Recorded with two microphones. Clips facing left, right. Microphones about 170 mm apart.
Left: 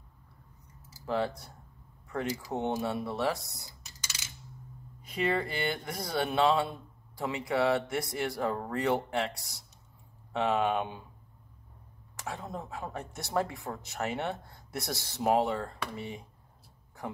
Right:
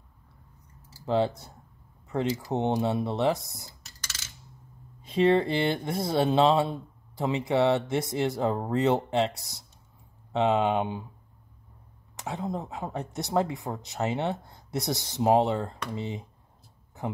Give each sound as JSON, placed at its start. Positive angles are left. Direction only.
{"t": 1.0, "sound": "speech", "side_deg": -25}
{"t": 5.0, "sound": "speech", "side_deg": -25}
{"t": 10.3, "sound": "speech", "side_deg": -20}
{"t": 12.2, "sound": "speech", "side_deg": -20}